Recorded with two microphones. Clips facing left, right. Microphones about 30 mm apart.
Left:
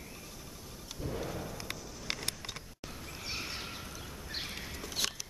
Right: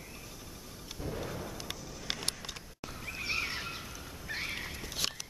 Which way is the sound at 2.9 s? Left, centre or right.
Centre.